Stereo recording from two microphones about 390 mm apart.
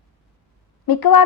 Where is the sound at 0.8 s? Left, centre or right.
Left.